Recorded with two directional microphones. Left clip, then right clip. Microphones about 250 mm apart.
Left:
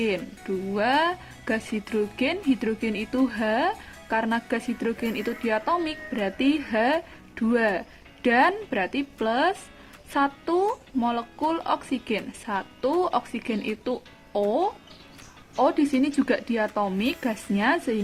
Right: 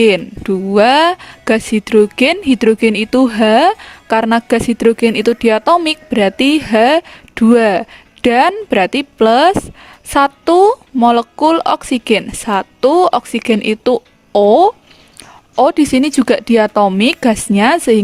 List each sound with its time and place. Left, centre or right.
0.0 s a woman's voice: right